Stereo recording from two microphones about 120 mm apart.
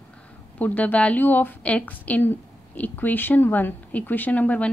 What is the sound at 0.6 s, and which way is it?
A woman's voice, 15° left (ahead or behind).